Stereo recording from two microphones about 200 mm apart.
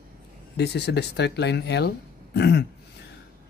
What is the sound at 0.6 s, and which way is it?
Speech, 55° left (ahead or behind).